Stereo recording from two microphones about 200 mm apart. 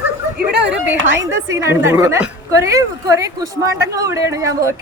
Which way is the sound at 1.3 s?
15° right (ahead or behind).